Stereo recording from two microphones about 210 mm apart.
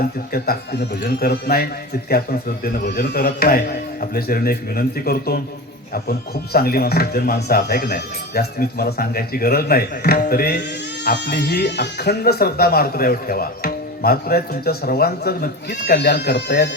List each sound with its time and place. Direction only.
0.0 s speech: 45° left (ahead or behind)